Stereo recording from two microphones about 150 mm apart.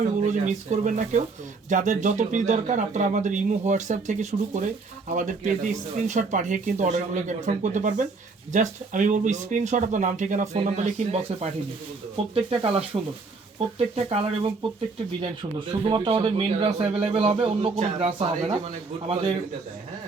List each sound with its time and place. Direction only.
0.2 s speech: 50° right (ahead or behind)
15.8 s speech: 35° right (ahead or behind)